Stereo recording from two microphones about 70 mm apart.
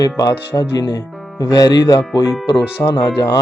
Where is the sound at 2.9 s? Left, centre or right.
Left.